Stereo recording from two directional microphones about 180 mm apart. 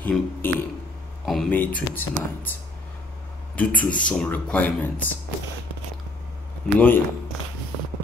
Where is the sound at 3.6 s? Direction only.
5° left (ahead or behind).